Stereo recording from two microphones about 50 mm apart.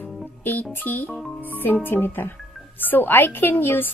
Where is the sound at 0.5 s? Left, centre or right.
Left.